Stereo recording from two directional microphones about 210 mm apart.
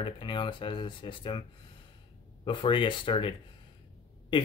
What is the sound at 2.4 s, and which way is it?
Speech, 25° left (ahead or behind).